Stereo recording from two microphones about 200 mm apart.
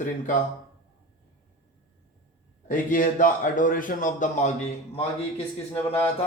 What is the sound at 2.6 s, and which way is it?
A man's voice, 40° left (ahead or behind).